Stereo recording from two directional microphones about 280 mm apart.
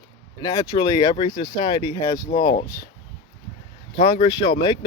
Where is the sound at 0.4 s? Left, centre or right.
Centre.